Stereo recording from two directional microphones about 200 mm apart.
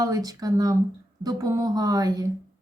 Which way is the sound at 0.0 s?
20° right (ahead or behind).